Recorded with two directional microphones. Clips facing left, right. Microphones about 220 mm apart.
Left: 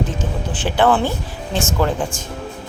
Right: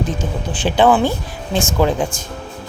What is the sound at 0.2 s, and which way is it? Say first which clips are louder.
Speech: right 2 dB; 15° right (ahead or behind).